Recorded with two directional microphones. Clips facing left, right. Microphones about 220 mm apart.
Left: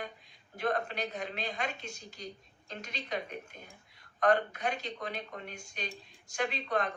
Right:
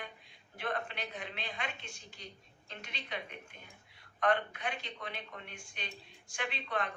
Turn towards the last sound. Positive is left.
turn(degrees=40)  # may be behind; listen again after turning